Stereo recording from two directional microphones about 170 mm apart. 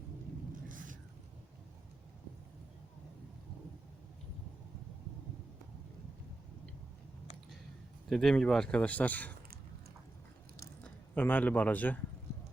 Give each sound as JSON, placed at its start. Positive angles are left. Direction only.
{"t": 0.7, "sound": "a sound", "side_deg": -50}
{"t": 8.1, "sound": "speech", "side_deg": 5}
{"t": 10.8, "sound": "a man's voice", "side_deg": 10}